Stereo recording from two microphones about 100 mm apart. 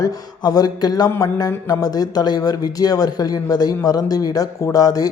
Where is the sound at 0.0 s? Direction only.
40° left (ahead or behind).